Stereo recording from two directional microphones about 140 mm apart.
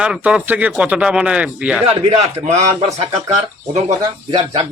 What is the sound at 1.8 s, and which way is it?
Speech, 45° right (ahead or behind).